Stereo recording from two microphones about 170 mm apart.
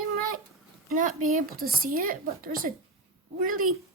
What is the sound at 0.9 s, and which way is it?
A child's voice, 50° right (ahead or behind).